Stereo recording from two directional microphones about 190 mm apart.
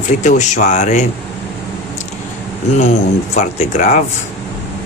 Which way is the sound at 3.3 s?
40° left (ahead or behind).